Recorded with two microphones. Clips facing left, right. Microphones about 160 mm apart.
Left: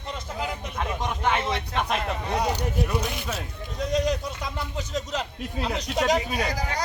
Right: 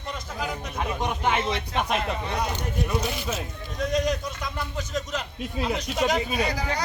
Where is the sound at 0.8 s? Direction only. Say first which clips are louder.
Right 1 dB; 10° right (ahead or behind).